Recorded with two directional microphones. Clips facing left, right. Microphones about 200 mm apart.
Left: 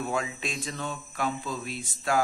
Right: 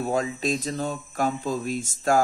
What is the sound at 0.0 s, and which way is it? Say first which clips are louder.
Speech: right 6 dB; 40° right (ahead or behind).